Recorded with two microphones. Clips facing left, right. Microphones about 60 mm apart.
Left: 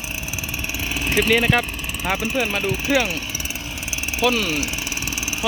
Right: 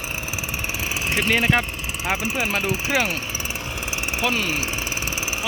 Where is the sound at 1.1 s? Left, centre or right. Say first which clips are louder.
Left 4 dB; centre.